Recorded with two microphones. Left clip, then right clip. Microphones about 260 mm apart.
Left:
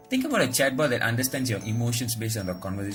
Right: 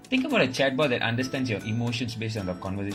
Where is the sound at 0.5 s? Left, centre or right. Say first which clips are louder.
Even; centre.